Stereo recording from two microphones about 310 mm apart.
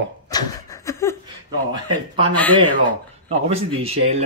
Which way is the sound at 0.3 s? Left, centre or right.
Centre.